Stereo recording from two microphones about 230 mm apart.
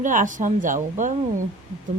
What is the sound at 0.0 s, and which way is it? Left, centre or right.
A woman's voice, right.